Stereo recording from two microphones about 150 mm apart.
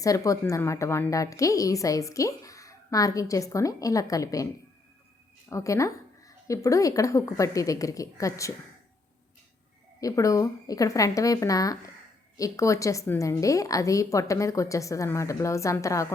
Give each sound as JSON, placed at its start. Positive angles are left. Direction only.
{"t": 0.0, "sound": "a woman's voice", "side_deg": 20}
{"t": 5.5, "sound": "a woman's voice", "side_deg": 20}
{"t": 10.0, "sound": "a woman's voice", "side_deg": 20}